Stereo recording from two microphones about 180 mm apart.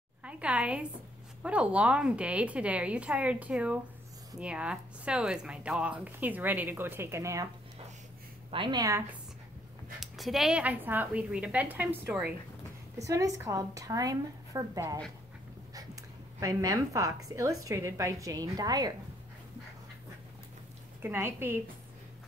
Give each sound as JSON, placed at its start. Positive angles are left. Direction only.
{"t": 0.2, "sound": "a woman's voice", "side_deg": -5}
{"t": 8.5, "sound": "a woman's voice", "side_deg": -25}
{"t": 9.9, "sound": "speech", "side_deg": 0}
{"t": 13.0, "sound": "a woman's voice", "side_deg": -20}
{"t": 21.0, "sound": "speech", "side_deg": -15}